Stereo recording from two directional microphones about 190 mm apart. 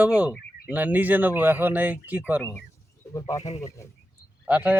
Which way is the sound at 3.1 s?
15° left (ahead or behind).